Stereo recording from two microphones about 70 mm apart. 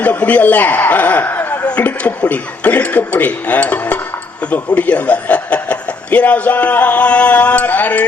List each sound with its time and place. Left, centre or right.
0.0 s speech: left